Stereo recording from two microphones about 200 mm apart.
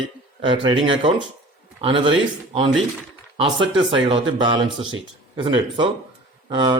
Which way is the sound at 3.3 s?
25° right (ahead or behind).